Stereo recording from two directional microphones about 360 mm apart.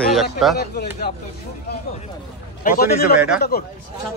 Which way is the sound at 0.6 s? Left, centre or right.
Left.